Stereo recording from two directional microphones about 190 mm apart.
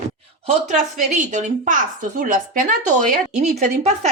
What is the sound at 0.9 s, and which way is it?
Speech, 40° right (ahead or behind).